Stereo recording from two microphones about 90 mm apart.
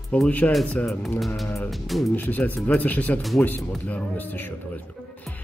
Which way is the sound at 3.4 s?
20° left (ahead or behind).